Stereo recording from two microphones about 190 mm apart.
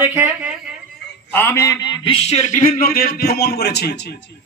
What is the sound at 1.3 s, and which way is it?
A man's voice, 10° left (ahead or behind).